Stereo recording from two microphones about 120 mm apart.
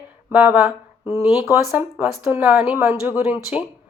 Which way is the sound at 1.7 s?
20° right (ahead or behind).